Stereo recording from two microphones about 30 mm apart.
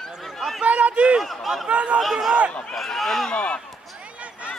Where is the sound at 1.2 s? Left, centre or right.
Centre.